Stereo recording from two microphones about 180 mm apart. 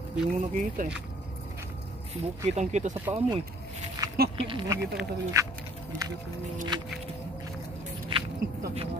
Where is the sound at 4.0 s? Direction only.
20° right (ahead or behind).